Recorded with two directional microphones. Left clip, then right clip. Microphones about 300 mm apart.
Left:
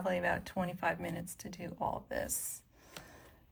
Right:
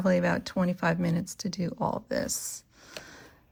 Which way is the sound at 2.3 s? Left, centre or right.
Centre.